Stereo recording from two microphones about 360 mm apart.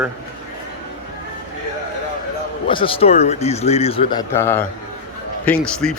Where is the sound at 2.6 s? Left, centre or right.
Centre.